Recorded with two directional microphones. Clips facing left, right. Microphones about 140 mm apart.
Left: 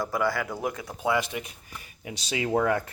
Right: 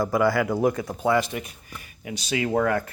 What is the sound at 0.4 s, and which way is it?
Speech, 40° right (ahead or behind).